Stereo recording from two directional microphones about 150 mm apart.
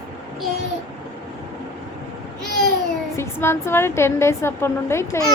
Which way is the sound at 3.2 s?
15° left (ahead or behind).